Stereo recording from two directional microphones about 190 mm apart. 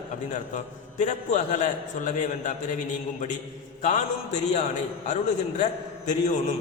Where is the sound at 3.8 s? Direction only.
40° left (ahead or behind).